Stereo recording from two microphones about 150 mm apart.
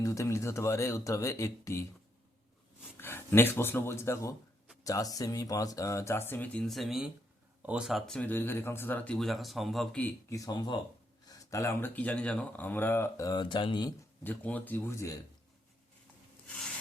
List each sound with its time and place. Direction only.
0.0 s speech: 20° left (ahead or behind)
3.0 s speech: 15° left (ahead or behind)
10.2 s speech: 20° left (ahead or behind)
14.3 s speech: 10° left (ahead or behind)